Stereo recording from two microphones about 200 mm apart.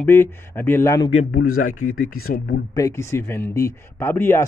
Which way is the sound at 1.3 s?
45° left (ahead or behind).